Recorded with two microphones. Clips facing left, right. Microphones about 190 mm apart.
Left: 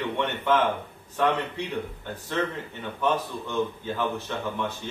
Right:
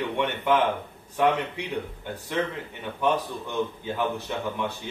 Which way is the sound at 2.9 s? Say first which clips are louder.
Right 1 dB; 15° right (ahead or behind).